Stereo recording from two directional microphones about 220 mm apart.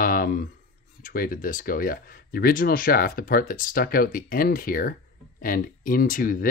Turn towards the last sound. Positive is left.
turn(degrees=40)  # may be behind; listen again after turning